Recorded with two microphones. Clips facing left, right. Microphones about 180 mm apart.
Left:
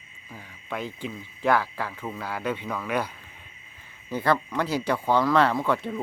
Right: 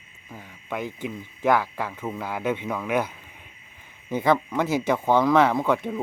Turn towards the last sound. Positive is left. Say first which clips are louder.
# right 2 dB
turn(degrees=-15)  # may be behind; listen again after turning